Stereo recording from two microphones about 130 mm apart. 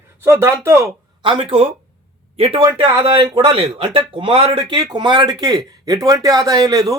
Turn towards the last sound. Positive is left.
turn(degrees=-30)  # may be behind; listen again after turning